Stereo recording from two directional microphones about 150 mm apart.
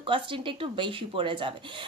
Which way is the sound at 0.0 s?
35° right (ahead or behind).